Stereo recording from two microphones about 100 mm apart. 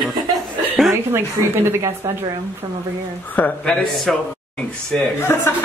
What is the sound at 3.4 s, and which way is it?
Speech, 15° left (ahead or behind).